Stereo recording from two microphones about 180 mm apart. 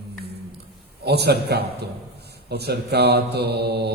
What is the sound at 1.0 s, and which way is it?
Mantra, 65° right (ahead or behind).